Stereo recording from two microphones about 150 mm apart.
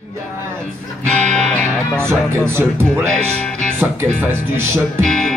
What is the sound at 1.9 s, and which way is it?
Speech, 15° right (ahead or behind).